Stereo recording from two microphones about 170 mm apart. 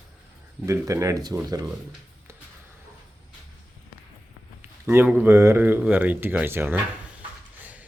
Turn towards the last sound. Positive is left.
turn(degrees=-10)  # may be behind; listen again after turning